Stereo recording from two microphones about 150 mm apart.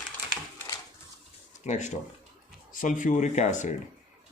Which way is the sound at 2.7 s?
65° left (ahead or behind).